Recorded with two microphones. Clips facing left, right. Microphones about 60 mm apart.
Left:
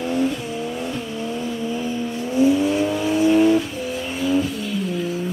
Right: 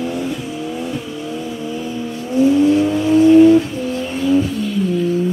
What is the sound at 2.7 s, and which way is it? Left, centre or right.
Vehicle, centre.